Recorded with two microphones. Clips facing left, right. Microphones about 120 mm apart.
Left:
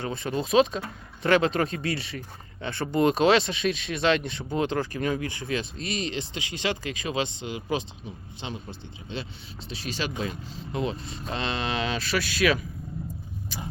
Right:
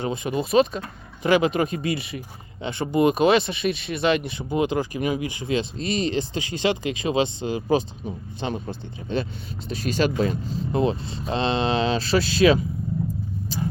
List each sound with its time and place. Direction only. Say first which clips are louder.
0.0 s speech: right 4 dB; 15° right (ahead or behind)
5.7 s speech: right 7 dB; 35° right (ahead or behind)
13.5 s vehicle: right 10 dB; 30° right (ahead or behind)